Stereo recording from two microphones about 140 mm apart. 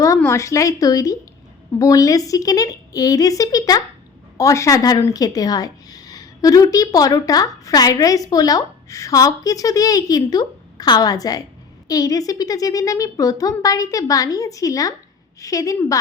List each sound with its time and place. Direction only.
0.2 s speech: 20° left (ahead or behind)